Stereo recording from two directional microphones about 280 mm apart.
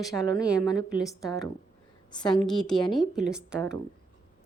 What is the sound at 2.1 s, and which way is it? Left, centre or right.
Speech, centre.